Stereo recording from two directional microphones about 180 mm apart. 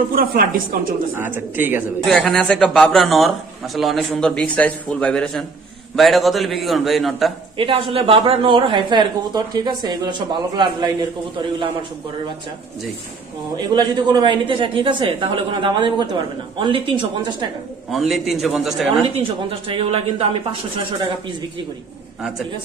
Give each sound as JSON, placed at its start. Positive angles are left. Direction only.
{"t": 0.1, "sound": "a woman's voice", "side_deg": -55}
{"t": 1.1, "sound": "speech", "side_deg": -10}
{"t": 2.0, "sound": "speech", "side_deg": 5}
{"t": 7.5, "sound": "a woman's voice", "side_deg": -30}
{"t": 13.6, "sound": "a woman's voice", "side_deg": -25}
{"t": 17.9, "sound": "speech", "side_deg": 0}
{"t": 19.1, "sound": "speech", "side_deg": -35}